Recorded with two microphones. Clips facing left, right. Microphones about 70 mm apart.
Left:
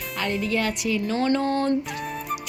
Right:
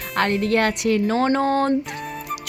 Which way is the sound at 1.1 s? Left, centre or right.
Right.